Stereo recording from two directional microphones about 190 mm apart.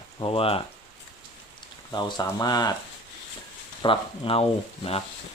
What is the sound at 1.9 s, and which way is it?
Speech, 20° left (ahead or behind).